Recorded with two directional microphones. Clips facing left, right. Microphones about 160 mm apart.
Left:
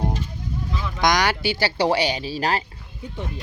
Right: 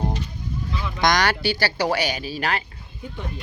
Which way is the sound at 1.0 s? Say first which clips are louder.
Even; 15° left (ahead or behind).